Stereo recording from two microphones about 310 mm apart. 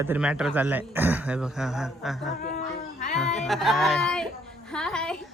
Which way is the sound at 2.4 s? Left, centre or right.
Left.